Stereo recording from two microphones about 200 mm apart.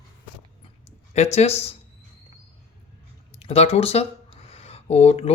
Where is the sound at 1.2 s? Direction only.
35° left (ahead or behind).